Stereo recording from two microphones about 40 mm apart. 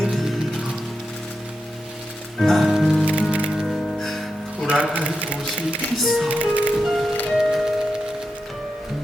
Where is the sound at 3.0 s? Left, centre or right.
Right.